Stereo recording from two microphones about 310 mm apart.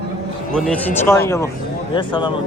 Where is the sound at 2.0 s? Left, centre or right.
Centre.